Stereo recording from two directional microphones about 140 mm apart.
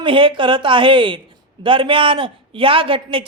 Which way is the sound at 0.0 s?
40° right (ahead or behind).